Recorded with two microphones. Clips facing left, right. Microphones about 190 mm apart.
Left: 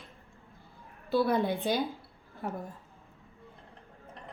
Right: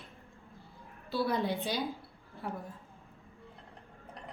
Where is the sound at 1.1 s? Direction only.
55° left (ahead or behind).